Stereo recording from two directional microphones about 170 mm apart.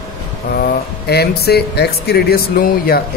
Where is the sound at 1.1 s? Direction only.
70° left (ahead or behind).